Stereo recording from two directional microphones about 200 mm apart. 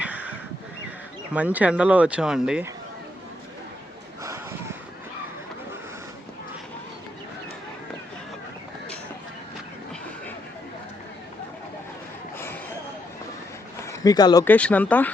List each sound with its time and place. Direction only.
0.0 s crow: 5° right (ahead or behind)
1.3 s speech: 5° right (ahead or behind)
13.8 s speech: 20° left (ahead or behind)
14.4 s speech: 10° left (ahead or behind)